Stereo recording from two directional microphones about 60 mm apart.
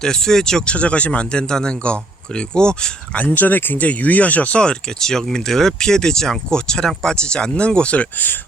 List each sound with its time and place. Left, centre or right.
0.0 s speech: centre; by 8.4 s left